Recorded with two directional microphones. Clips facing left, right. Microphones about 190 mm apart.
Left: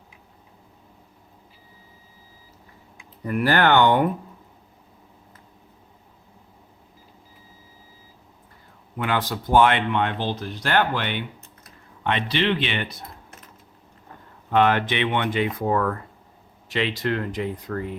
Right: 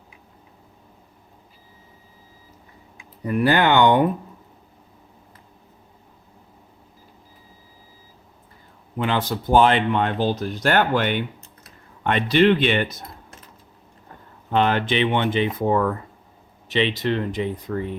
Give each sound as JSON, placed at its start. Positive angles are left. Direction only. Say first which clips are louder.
{"t": 3.2, "sound": "speech", "louder": "right 1 dB", "side_deg": -15}
{"t": 9.0, "sound": "speech", "louder": "right 2 dB", "side_deg": -30}
{"t": 14.5, "sound": "speech", "louder": "even", "side_deg": -30}